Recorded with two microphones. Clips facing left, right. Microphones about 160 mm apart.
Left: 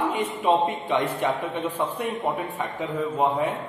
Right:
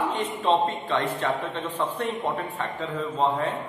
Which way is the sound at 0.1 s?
15° left (ahead or behind).